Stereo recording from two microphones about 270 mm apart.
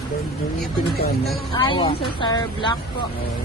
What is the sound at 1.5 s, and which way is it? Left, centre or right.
Speech, centre.